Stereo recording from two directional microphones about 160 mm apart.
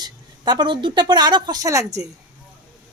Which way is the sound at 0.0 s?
25° right (ahead or behind).